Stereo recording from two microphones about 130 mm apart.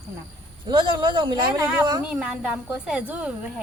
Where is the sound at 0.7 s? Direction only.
40° right (ahead or behind).